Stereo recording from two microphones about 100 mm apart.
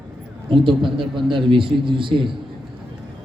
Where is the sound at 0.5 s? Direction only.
60° right (ahead or behind).